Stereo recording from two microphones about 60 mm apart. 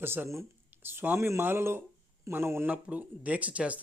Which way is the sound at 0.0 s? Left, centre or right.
Right.